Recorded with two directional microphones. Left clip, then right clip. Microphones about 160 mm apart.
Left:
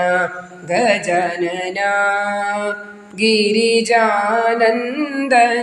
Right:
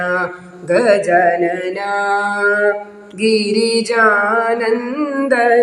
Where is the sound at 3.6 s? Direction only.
35° left (ahead or behind).